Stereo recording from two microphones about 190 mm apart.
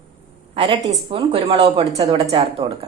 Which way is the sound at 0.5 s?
25° right (ahead or behind).